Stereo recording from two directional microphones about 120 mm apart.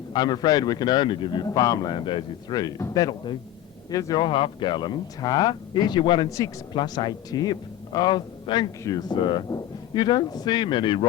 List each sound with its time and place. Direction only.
0.1 s speech: 35° left (ahead or behind)
1.5 s speech: 30° left (ahead or behind)
4.3 s speech: 45° left (ahead or behind)
8.8 s speech: 30° left (ahead or behind)
9.1 s speech: 40° left (ahead or behind)